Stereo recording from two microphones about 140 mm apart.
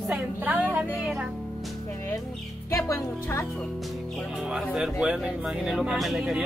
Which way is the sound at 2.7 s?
20° left (ahead or behind).